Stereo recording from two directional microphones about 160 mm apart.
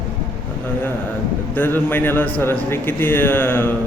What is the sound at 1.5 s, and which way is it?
A man's voice, 15° left (ahead or behind).